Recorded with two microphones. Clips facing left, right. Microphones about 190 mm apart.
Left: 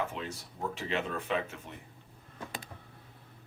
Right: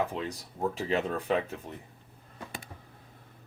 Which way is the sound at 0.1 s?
35° right (ahead or behind).